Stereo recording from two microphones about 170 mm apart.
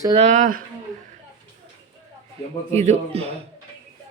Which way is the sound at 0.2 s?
45° right (ahead or behind).